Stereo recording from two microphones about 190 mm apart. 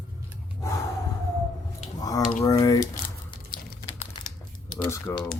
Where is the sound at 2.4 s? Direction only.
20° left (ahead or behind).